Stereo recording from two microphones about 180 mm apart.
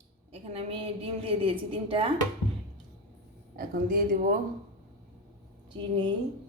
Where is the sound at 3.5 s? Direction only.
55° right (ahead or behind).